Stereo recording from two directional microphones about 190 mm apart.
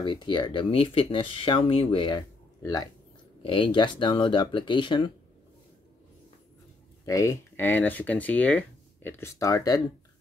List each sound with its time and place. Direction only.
0.0 s speech: 25° left (ahead or behind)
7.1 s speech: 15° left (ahead or behind)